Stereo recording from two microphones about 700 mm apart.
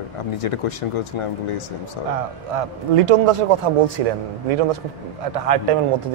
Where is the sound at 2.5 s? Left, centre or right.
Right.